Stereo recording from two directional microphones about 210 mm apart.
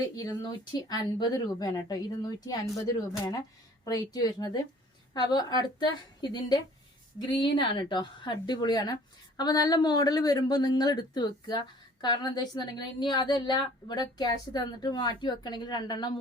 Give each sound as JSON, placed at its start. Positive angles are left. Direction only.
{"t": 0.2, "sound": "a woman's voice", "side_deg": 20}